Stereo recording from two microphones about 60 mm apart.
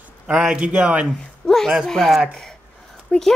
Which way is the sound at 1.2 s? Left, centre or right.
Centre.